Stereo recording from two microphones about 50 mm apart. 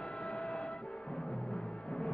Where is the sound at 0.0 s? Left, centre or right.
Centre.